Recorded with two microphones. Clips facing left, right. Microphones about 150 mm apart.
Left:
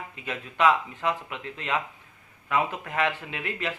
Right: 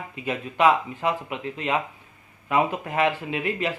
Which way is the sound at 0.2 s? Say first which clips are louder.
Right 3 dB; 15° right (ahead or behind).